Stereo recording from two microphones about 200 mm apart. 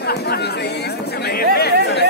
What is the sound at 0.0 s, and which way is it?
Chatter, 55° left (ahead or behind).